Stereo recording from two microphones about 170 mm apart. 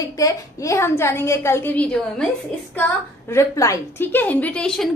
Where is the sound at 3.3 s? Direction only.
20° left (ahead or behind).